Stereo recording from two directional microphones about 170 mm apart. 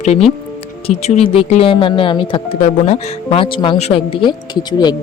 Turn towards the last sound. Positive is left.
turn(degrees=25)  # may be behind; listen again after turning